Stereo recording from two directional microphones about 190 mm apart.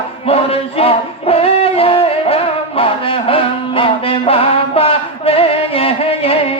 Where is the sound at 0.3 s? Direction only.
30° left (ahead or behind).